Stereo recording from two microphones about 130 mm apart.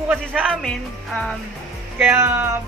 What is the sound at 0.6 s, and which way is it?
Speech, 5° left (ahead or behind).